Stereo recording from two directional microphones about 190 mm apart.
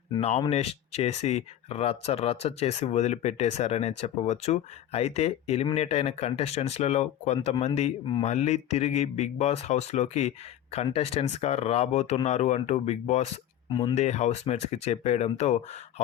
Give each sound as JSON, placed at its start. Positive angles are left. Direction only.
{"t": 0.2, "sound": "speech", "side_deg": 30}
{"t": 7.3, "sound": "speech", "side_deg": 25}
{"t": 7.6, "sound": "speech", "side_deg": 35}
{"t": 13.9, "sound": "speech", "side_deg": 35}